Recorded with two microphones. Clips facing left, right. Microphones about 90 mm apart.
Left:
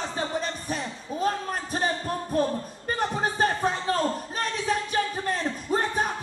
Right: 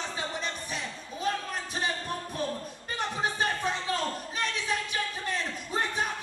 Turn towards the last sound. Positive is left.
turn(degrees=40)  # may be behind; listen again after turning